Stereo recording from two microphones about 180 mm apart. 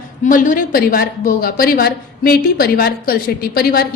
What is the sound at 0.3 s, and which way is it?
A woman's voice, 50° left (ahead or behind).